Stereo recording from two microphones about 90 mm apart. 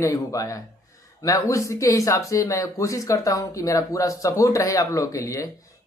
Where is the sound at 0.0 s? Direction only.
35° left (ahead or behind).